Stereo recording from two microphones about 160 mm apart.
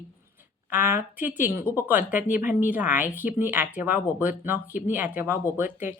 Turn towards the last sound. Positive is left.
turn(degrees=-15)  # may be behind; listen again after turning